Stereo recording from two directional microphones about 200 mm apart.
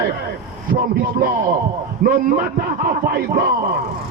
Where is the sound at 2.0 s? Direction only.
40° right (ahead or behind).